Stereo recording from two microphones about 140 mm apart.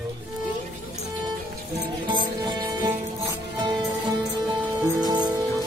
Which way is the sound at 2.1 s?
30° right (ahead or behind).